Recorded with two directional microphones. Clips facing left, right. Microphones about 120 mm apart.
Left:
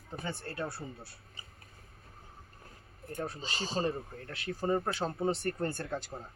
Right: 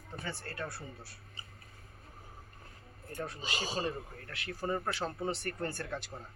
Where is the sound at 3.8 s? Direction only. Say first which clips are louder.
Left 3 dB; 25° left (ahead or behind).